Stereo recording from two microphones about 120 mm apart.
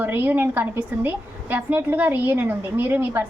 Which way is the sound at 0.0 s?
15° right (ahead or behind).